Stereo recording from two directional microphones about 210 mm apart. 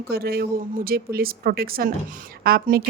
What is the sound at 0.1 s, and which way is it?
A woman's voice, 50° right (ahead or behind).